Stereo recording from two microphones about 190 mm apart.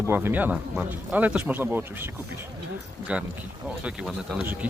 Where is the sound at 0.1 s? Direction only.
10° right (ahead or behind).